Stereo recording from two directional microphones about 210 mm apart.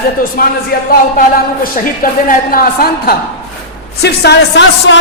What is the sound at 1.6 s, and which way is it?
A man's voice, 45° left (ahead or behind).